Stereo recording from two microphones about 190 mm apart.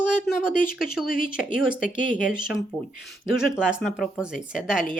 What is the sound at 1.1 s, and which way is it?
Speech, 50° left (ahead or behind).